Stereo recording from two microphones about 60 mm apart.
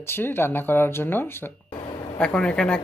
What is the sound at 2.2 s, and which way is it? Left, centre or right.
Speech, centre.